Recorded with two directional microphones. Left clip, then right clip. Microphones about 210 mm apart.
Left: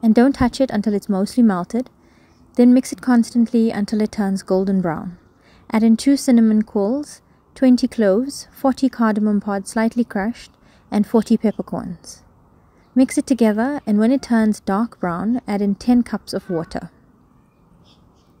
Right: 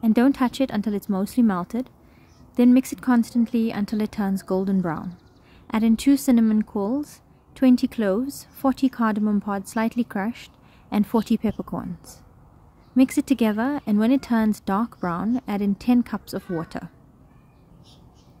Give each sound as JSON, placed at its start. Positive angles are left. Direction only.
{"t": 0.0, "sound": "speech", "side_deg": 20}
{"t": 12.9, "sound": "speech", "side_deg": 15}